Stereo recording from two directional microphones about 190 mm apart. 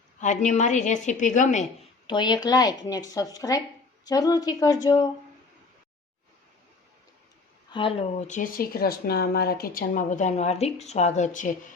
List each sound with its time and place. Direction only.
0.2 s a woman's voice: 40° left (ahead or behind)
2.0 s speech: 25° left (ahead or behind)
7.7 s speech: 25° left (ahead or behind)
8.4 s a woman's voice: 50° left (ahead or behind)